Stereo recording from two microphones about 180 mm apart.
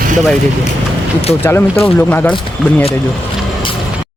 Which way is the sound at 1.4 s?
10° left (ahead or behind).